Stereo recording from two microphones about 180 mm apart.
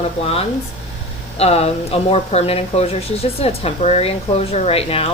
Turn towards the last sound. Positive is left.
turn(degrees=35)  # may be behind; listen again after turning